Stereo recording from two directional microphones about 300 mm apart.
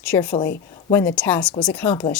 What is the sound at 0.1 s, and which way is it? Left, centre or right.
A woman's voice, centre.